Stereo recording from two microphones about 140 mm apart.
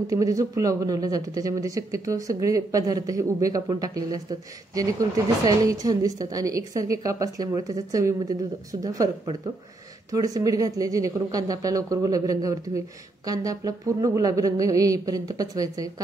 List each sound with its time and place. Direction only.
0.0 s speech: 25° right (ahead or behind)